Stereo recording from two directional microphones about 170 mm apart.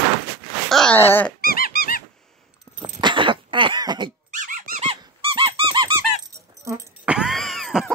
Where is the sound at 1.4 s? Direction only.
60° left (ahead or behind).